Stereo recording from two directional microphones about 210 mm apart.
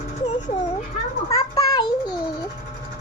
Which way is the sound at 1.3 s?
20° left (ahead or behind).